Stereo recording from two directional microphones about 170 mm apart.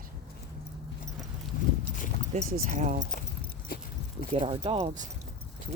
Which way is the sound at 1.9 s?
50° left (ahead or behind).